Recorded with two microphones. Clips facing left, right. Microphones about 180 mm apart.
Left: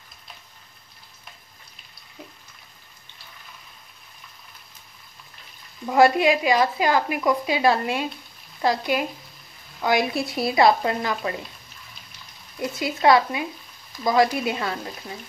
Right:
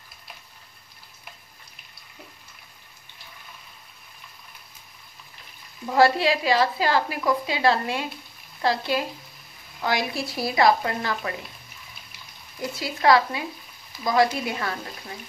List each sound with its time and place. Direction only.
6.2 s a woman's voice: 15° left (ahead or behind)
12.5 s a woman's voice: 20° left (ahead or behind)